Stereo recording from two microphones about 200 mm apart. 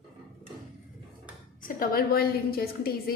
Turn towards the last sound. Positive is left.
turn(degrees=50)  # may be behind; listen again after turning